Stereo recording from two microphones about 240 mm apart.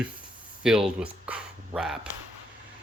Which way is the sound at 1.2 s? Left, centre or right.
Centre.